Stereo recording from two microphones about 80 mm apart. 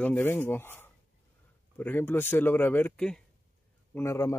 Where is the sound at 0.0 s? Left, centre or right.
Left.